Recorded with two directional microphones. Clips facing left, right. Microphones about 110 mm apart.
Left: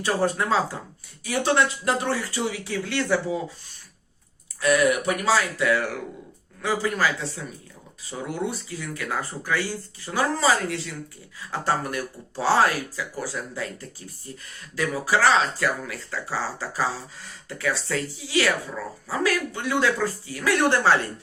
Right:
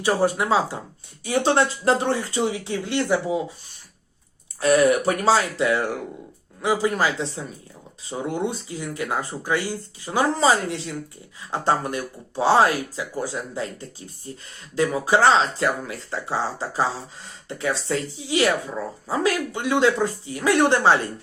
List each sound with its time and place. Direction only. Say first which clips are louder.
0.0 s speech: right 3 dB; 15° right (ahead or behind)
4.6 s speech: right 3 dB; 35° right (ahead or behind)
14.8 s speech: right 4 dB; 25° right (ahead or behind)